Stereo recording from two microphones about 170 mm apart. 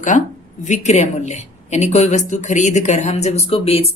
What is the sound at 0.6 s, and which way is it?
A woman's voice, 45° left (ahead or behind).